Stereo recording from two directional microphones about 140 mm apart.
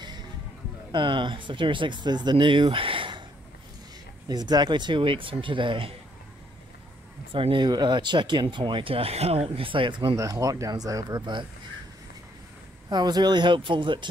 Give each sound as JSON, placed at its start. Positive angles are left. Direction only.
{"t": 0.9, "sound": "speech", "side_deg": -35}
{"t": 4.3, "sound": "speech", "side_deg": -30}
{"t": 7.3, "sound": "speech", "side_deg": -35}
{"t": 12.9, "sound": "speech", "side_deg": -30}